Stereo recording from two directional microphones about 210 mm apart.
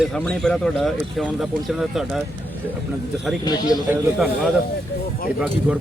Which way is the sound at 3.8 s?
5° right (ahead or behind).